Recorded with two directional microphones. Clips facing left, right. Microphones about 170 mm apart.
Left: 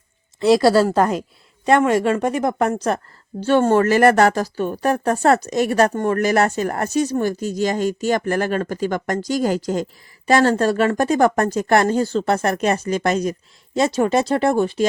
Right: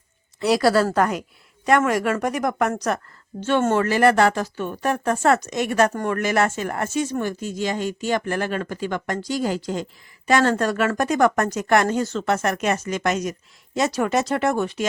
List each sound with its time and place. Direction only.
0.3 s a woman's voice: 30° left (ahead or behind)